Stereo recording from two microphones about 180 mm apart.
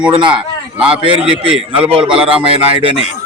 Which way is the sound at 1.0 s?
30° right (ahead or behind).